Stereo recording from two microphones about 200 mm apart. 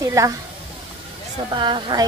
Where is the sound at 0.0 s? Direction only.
15° right (ahead or behind).